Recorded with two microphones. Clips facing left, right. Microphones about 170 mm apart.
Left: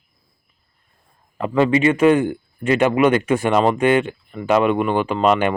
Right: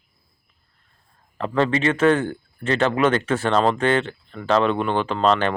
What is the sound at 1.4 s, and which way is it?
Speech, 10° left (ahead or behind).